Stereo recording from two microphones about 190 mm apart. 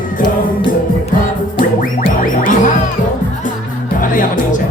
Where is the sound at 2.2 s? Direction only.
45° left (ahead or behind).